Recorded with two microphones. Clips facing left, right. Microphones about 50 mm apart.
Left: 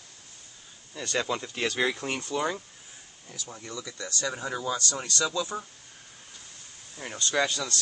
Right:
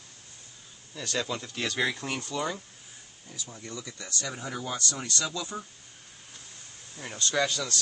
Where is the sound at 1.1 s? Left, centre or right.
Centre.